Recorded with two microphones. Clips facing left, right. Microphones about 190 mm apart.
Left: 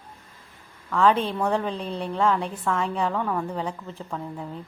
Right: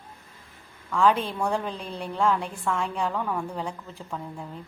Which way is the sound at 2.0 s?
5° right (ahead or behind).